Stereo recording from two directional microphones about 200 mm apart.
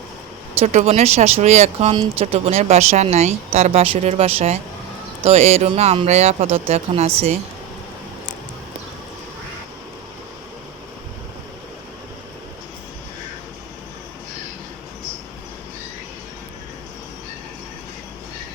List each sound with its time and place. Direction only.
0.6 s speech: 35° right (ahead or behind)